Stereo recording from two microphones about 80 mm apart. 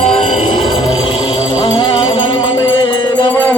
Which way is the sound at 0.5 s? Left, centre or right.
Left.